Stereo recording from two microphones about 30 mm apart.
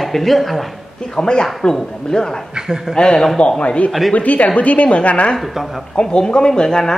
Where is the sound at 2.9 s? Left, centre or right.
Left.